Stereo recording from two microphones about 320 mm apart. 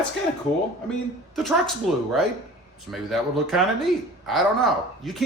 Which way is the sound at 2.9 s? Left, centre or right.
Centre.